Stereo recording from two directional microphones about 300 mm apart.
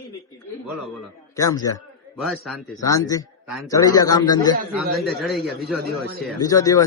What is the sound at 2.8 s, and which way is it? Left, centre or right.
A man's voice, centre.